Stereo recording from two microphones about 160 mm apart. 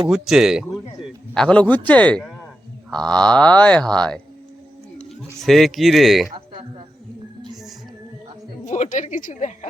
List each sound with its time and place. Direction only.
0.1 s a man's voice: 5° right (ahead or behind)
6.5 s a sound: 35° right (ahead or behind)
8.6 s a woman's voice: 50° left (ahead or behind)